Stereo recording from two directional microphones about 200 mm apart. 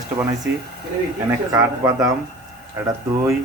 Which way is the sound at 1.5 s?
15° right (ahead or behind).